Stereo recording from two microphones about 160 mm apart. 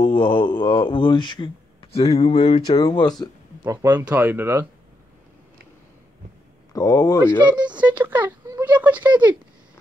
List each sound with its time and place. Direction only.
0.0 s speech: 35° left (ahead or behind)
3.6 s speech: 15° right (ahead or behind)
6.7 s speech: 20° left (ahead or behind)
7.4 s speech: 30° right (ahead or behind)
7.8 s speech: 10° right (ahead or behind)